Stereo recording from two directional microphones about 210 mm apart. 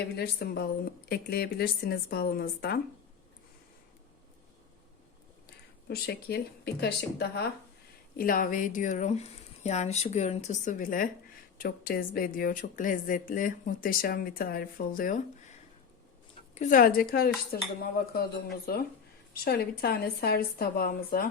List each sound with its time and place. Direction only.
0.2 s speech: 50° left (ahead or behind)
5.9 s speech: 50° left (ahead or behind)
16.6 s speech: 40° left (ahead or behind)